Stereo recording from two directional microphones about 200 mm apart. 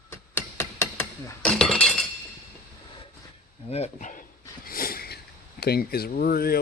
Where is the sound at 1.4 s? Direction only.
Centre (ahead or behind).